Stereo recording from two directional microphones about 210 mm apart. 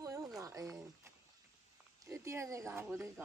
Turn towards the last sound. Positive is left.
turn(degrees=-10)  # may be behind; listen again after turning